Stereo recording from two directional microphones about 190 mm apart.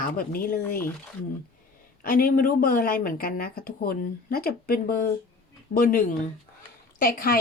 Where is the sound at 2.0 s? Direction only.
50° left (ahead or behind).